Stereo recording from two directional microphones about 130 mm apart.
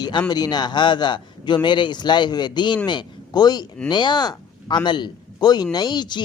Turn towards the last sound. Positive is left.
turn(degrees=35)  # may be behind; listen again after turning